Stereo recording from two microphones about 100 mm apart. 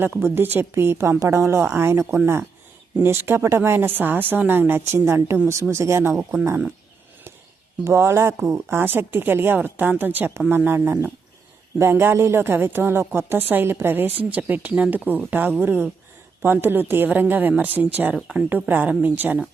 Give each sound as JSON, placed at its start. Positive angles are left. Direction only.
{"t": 0.0, "sound": "speech", "side_deg": -20}
{"t": 7.9, "sound": "speech", "side_deg": -25}